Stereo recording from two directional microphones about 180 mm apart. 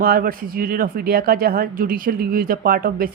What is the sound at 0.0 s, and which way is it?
Speech, 55° right (ahead or behind).